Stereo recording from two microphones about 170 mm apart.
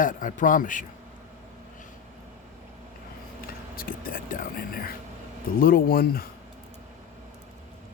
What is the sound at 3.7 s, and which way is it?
Whispering, 55° left (ahead or behind).